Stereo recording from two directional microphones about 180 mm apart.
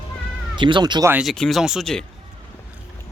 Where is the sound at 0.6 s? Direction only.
25° right (ahead or behind).